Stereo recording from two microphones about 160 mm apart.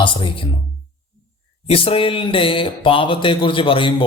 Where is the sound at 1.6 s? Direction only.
35° left (ahead or behind).